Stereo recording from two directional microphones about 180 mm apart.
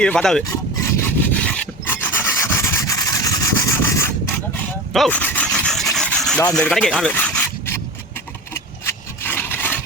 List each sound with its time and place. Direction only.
0.0 s speech: 5° left (ahead or behind)
0.5 s rub: 15° left (ahead or behind)
6.5 s speech: 5° left (ahead or behind)
8.5 s a sound: 15° left (ahead or behind)